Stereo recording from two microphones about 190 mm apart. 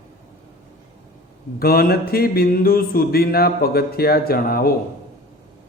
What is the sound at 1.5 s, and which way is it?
Mantra, 50° left (ahead or behind).